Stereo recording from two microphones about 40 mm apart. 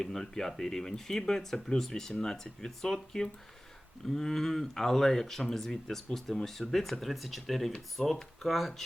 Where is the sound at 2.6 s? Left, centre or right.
Centre.